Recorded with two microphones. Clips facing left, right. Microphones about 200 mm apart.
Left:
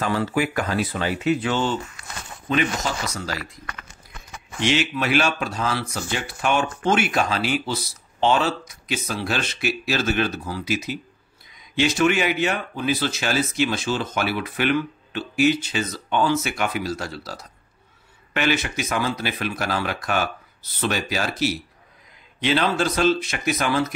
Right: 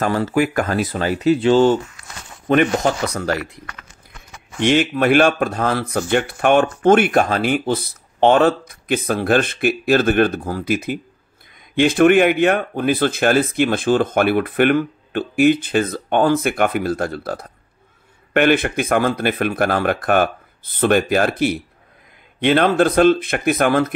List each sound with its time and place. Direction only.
0.0 s speech: 45° right (ahead or behind)
2.4 s speech: 55° right (ahead or behind)
4.6 s speech: 50° right (ahead or behind)